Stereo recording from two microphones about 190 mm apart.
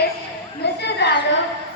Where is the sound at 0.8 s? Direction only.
60° left (ahead or behind).